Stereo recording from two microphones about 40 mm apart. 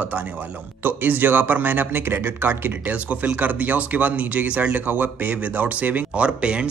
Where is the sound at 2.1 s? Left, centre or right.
Right.